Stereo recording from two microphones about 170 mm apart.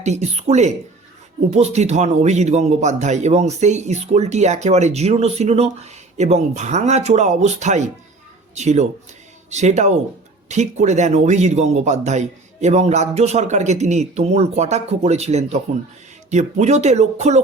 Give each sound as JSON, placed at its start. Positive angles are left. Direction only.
{"t": 0.0, "sound": "speech", "side_deg": -40}